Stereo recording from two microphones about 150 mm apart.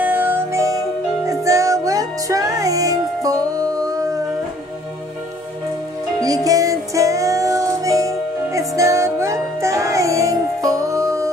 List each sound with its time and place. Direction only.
0.0 s music: 15° right (ahead or behind)
6.1 s music: 25° right (ahead or behind)